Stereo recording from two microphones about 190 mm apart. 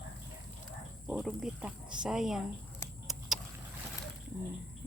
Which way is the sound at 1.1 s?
Centre (ahead or behind).